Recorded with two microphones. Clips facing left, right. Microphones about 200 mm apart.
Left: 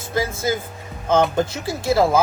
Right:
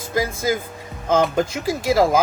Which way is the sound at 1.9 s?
10° right (ahead or behind).